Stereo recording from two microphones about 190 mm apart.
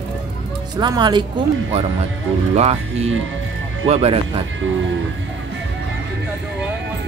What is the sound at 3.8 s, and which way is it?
Speech, 35° right (ahead or behind).